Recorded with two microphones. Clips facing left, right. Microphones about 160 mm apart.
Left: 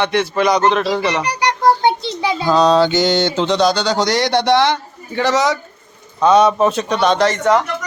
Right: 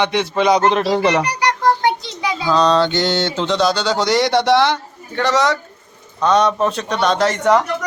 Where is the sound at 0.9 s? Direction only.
40° right (ahead or behind).